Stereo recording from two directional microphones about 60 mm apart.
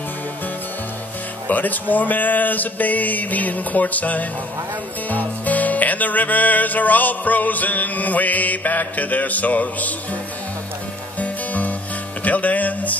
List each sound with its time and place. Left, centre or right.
1.5 s speech: left
5.1 s music: left
11.1 s music: left